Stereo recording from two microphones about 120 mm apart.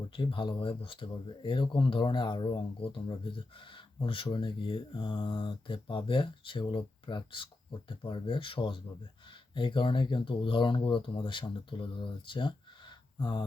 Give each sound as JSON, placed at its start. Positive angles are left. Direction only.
{"t": 0.1, "sound": "speech", "side_deg": 45}